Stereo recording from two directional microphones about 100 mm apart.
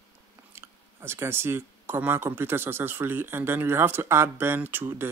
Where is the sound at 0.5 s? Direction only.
25° right (ahead or behind).